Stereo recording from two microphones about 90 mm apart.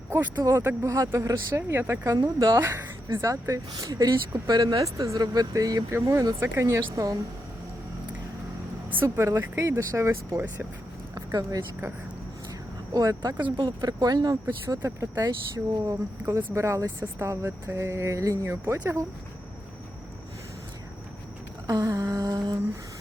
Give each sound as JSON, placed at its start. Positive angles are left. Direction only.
{"t": 0.5, "sound": "speech", "side_deg": -25}
{"t": 0.9, "sound": "speech", "side_deg": -35}
{"t": 2.0, "sound": "speech", "side_deg": -45}
{"t": 2.6, "sound": "speech", "side_deg": -30}
{"t": 9.0, "sound": "speech", "side_deg": -35}
{"t": 11.1, "sound": "a sound", "side_deg": -40}
{"t": 12.9, "sound": "speech", "side_deg": -40}
{"t": 21.7, "sound": "a sound", "side_deg": -40}